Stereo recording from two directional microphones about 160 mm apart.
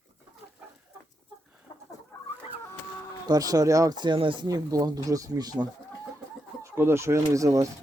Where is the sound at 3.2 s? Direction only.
25° right (ahead or behind).